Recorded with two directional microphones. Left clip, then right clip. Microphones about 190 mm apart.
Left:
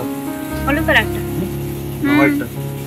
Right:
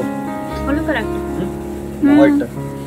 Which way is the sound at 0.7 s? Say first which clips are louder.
Left 5 dB; 10° right (ahead or behind).